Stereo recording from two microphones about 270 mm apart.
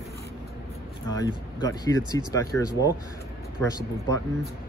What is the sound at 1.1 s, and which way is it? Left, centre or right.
A man's voice, centre.